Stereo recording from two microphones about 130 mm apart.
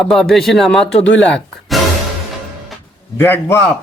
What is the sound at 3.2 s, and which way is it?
Speech, 15° left (ahead or behind).